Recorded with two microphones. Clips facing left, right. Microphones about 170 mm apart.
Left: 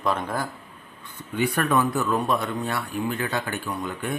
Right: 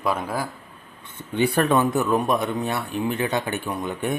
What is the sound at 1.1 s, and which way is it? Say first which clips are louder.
Speech: right 4 dB; 30° right (ahead or behind).